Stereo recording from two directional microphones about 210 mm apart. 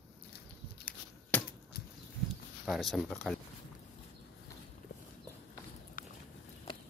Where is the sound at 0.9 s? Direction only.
40° left (ahead or behind).